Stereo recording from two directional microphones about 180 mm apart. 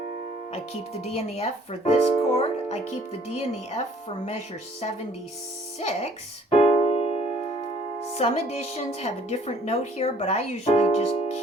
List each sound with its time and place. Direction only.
0.5 s speech: 35° left (ahead or behind)
5.8 s speech: 35° left (ahead or behind)
6.5 s keyboard: 35° left (ahead or behind)
8.0 s speech: 35° left (ahead or behind)